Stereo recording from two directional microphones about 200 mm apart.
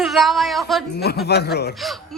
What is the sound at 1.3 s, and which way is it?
Speech, 55° left (ahead or behind).